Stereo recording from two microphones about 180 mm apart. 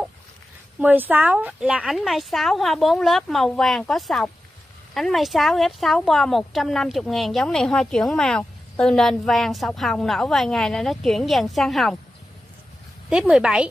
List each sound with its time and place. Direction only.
0.7 s a woman's voice: 10° right (ahead or behind)
13.1 s a woman's voice: 5° right (ahead or behind)